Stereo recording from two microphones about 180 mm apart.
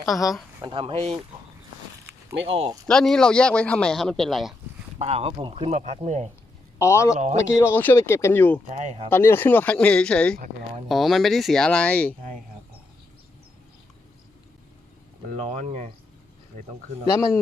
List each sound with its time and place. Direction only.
0.1 s speech: centre (ahead or behind)
0.6 s speech: 30° right (ahead or behind)
2.5 s speech: 30° right (ahead or behind)
2.8 s speech: 5° left (ahead or behind)
4.9 s speech: 35° right (ahead or behind)
6.7 s speech: 15° left (ahead or behind)
8.7 s speech: 40° right (ahead or behind)
9.0 s speech: 10° left (ahead or behind)
15.3 s speech: 40° right (ahead or behind)